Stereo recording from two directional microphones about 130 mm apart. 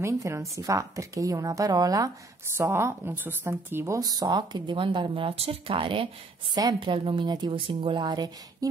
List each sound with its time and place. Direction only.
0.0 s a woman's voice: 25° right (ahead or behind); by 6.0 s 40° right (ahead or behind)
6.5 s a woman's voice: 30° right (ahead or behind)